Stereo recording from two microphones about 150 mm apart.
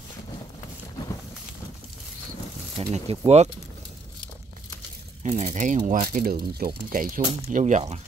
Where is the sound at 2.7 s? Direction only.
40° right (ahead or behind).